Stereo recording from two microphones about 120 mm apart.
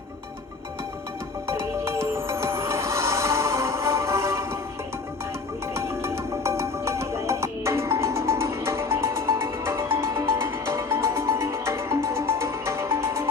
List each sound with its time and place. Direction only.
1.5 s music: 20° right (ahead or behind)
5.7 s music: 25° right (ahead or behind)